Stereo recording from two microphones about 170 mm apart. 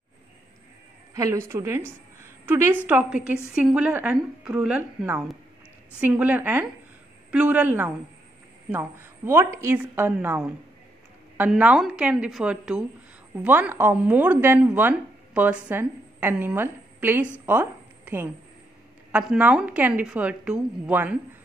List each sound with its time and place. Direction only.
1.1 s a woman's voice: 20° right (ahead or behind)
17.5 s a sound: 10° right (ahead or behind)
19.1 s speech: 5° right (ahead or behind)